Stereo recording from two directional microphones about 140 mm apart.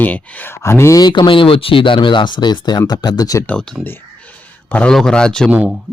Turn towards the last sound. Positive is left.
turn(degrees=-10)  # may be behind; listen again after turning